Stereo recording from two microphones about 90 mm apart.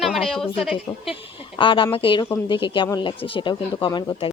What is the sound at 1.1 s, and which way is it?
Speech, 70° left (ahead or behind).